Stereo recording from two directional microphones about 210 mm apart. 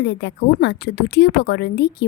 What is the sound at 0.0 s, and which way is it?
Speech, 55° left (ahead or behind).